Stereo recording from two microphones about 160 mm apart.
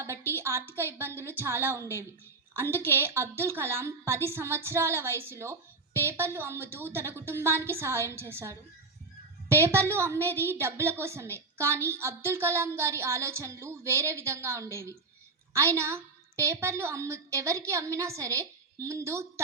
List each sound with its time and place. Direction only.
0.0 s a sound: 15° right (ahead or behind)
1.2 s a woman's voice: 15° right (ahead or behind)
9.6 s a woman's voice: 15° right (ahead or behind)